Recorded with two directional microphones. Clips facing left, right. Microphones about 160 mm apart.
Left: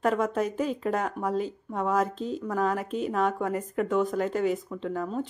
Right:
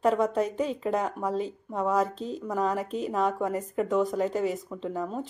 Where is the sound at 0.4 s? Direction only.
30° right (ahead or behind).